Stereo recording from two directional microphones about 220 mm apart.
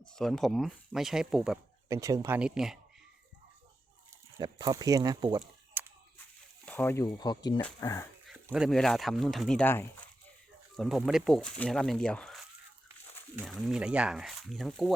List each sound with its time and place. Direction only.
0.2 s speech: centre (ahead or behind)
1.9 s speech: 15° right (ahead or behind)
4.4 s speech: 20° right (ahead or behind)
5.4 s a sound: 10° right (ahead or behind)
6.7 s speech: 10° left (ahead or behind)
8.3 s speech: centre (ahead or behind)
10.8 s speech: centre (ahead or behind)